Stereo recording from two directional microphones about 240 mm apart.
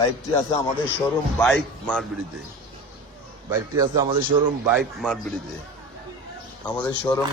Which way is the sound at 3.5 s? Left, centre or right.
Centre.